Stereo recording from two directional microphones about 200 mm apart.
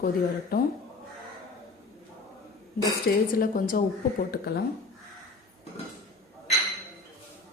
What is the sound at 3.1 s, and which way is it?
Speech, 50° left (ahead or behind).